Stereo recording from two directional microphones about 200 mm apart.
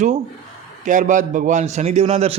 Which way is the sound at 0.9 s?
40° right (ahead or behind).